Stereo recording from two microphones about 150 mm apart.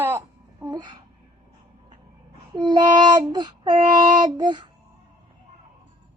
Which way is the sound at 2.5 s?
30° right (ahead or behind).